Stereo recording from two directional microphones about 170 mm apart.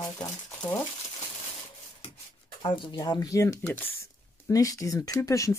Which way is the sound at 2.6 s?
25° left (ahead or behind).